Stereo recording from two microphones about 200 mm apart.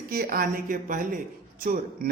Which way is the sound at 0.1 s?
50° right (ahead or behind).